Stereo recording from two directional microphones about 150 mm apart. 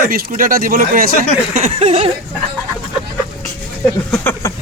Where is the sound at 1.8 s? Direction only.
45° right (ahead or behind).